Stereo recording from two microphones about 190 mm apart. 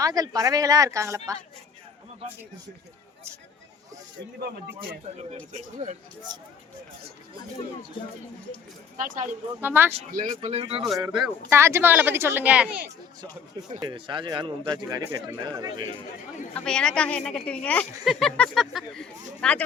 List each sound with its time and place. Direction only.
0.0 s speech: 20° right (ahead or behind)
5.5 s speech: 40° right (ahead or behind)
6.3 s speech: 20° right (ahead or behind)
9.0 s speech: 45° right (ahead or behind)
9.6 s speech: 10° right (ahead or behind)
10.1 s speech: 40° right (ahead or behind)
11.0 s speech: 15° right (ahead or behind)
13.7 s speech: 25° right (ahead or behind)
16.6 s speech: 5° left (ahead or behind)